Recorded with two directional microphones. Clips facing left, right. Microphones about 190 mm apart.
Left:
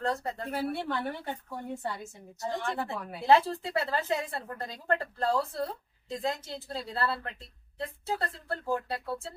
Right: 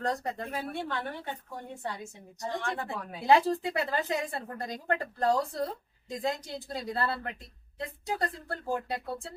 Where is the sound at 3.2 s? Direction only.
15° right (ahead or behind).